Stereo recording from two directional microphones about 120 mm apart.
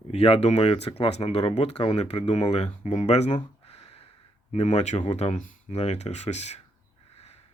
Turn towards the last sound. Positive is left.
turn(degrees=70)  # may be behind; listen again after turning